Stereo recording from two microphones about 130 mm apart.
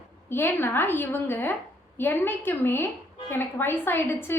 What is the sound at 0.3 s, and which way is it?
A woman's voice, 15° left (ahead or behind).